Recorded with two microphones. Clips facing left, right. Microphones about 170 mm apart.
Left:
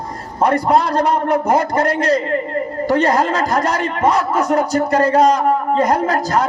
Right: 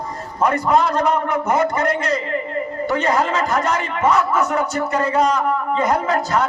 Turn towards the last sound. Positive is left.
turn(degrees=40)  # may be behind; listen again after turning